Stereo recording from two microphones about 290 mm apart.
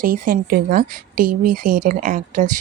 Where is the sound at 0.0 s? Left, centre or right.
Right.